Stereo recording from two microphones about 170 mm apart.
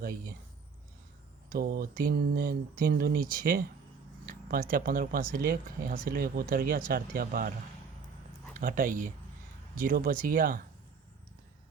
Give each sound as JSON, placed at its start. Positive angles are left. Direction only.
{"t": 0.0, "sound": "speech", "side_deg": -55}
{"t": 1.5, "sound": "speech", "side_deg": -65}
{"t": 8.5, "sound": "speech", "side_deg": -55}